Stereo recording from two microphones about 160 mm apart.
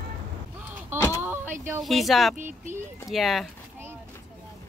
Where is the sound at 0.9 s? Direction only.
15° right (ahead or behind).